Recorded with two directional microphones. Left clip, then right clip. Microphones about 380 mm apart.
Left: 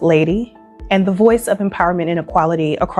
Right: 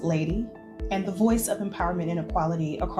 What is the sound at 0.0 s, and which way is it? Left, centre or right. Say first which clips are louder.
Speech: left 16 dB; left.